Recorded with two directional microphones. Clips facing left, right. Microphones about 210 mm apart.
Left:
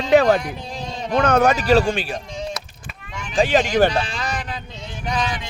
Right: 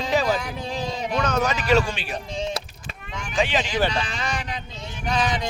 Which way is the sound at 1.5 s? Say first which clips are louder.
Left 4 dB; 35° left (ahead or behind).